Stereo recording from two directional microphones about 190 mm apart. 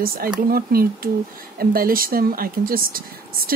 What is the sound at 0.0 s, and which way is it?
Speech, 50° right (ahead or behind).